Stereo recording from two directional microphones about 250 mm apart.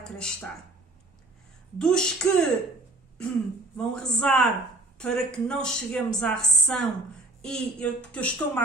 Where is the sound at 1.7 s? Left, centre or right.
Centre.